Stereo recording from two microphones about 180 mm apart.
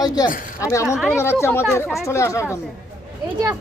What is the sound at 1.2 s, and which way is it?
A man's voice, 15° left (ahead or behind).